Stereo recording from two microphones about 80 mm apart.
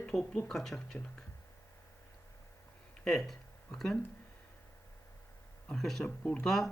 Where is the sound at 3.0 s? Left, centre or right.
Centre.